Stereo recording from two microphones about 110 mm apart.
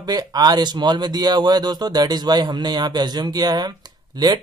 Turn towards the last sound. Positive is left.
turn(degrees=-35)  # may be behind; listen again after turning